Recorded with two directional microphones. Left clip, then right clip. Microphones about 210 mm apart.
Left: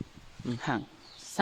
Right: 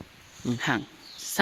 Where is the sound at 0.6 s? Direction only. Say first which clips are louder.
Right 5 dB; centre (ahead or behind).